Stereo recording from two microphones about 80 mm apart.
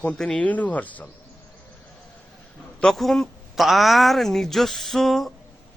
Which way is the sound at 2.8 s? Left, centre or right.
Centre.